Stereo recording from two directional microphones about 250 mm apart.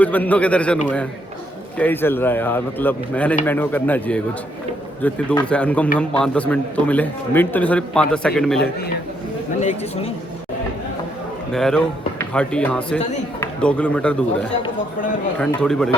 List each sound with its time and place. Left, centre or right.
0.0 s a man's voice: centre
1.8 s a man's voice: centre
9.6 s speech: left
11.5 s a man's voice: centre